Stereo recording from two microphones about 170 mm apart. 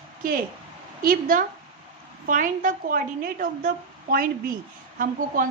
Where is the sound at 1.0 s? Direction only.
55° right (ahead or behind).